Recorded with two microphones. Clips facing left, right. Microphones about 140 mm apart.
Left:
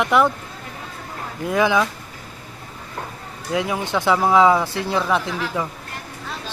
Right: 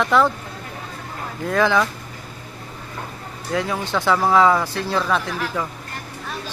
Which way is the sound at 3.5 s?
15° left (ahead or behind).